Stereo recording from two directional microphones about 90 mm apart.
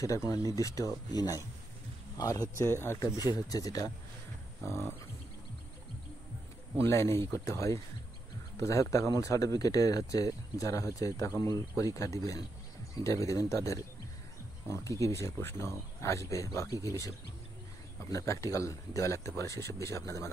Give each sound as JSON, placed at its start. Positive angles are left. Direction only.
{"t": 0.0, "sound": "speech", "side_deg": 35}
{"t": 2.5, "sound": "speech", "side_deg": 30}
{"t": 3.3, "sound": "speech", "side_deg": 45}
{"t": 4.6, "sound": "speech", "side_deg": 30}
{"t": 6.8, "sound": "speech", "side_deg": 30}
{"t": 18.1, "sound": "speech", "side_deg": 35}